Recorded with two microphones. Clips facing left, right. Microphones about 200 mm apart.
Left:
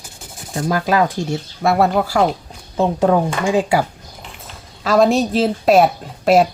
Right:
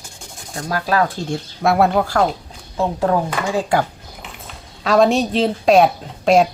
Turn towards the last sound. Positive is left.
turn(degrees=5)  # may be behind; listen again after turning